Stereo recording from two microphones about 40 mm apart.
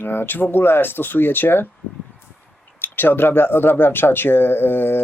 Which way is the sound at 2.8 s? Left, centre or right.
Left.